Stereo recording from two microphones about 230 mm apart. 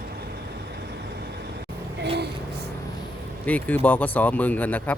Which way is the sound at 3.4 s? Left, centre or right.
Centre.